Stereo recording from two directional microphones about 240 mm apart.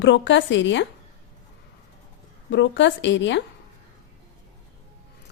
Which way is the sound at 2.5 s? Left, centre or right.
Left.